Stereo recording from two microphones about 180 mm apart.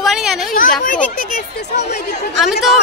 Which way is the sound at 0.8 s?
50° left (ahead or behind).